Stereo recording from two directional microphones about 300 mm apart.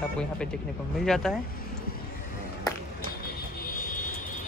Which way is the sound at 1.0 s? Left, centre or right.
Centre.